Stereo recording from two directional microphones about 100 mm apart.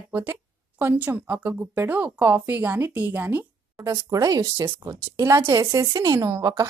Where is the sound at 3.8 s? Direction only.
35° right (ahead or behind).